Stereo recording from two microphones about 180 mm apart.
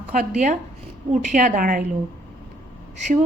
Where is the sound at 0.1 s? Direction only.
45° right (ahead or behind).